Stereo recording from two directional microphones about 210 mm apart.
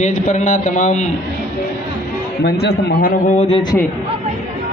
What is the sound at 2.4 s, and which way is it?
A man's voice, 50° left (ahead or behind).